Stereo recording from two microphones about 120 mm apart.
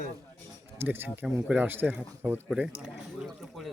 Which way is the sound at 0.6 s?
20° right (ahead or behind).